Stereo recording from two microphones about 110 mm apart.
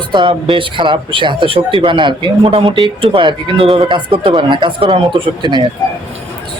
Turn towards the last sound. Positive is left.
turn(degrees=-45)  # may be behind; listen again after turning